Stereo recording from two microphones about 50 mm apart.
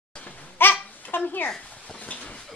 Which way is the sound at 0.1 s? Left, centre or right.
Left.